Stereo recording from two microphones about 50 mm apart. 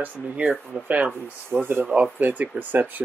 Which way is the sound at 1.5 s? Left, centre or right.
Right.